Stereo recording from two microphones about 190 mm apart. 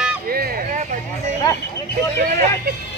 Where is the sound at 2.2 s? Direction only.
50° right (ahead or behind).